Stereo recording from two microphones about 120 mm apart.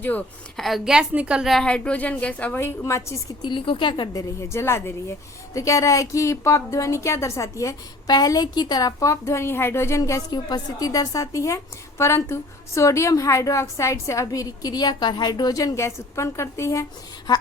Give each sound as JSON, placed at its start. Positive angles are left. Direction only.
{"t": 0.0, "sound": "a woman's voice", "side_deg": 15}
{"t": 0.5, "sound": "a woman's voice", "side_deg": 0}
{"t": 3.4, "sound": "speech", "side_deg": 40}